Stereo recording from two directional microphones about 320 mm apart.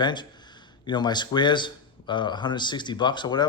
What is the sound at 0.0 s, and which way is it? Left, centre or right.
A man's voice, centre.